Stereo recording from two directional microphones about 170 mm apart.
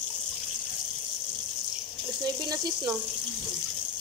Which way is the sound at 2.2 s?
25° right (ahead or behind).